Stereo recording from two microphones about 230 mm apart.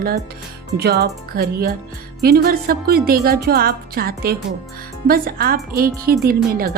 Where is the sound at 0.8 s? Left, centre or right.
Right.